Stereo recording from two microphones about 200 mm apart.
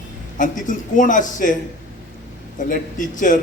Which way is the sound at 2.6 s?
40° left (ahead or behind).